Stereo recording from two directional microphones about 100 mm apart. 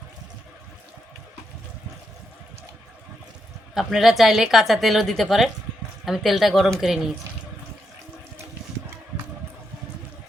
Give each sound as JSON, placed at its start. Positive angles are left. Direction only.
{"t": 3.8, "sound": "a woman's voice", "side_deg": 0}